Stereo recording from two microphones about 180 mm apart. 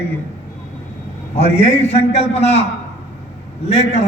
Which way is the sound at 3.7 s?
35° left (ahead or behind).